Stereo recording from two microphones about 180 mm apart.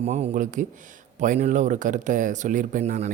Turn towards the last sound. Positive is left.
turn(degrees=-40)  # may be behind; listen again after turning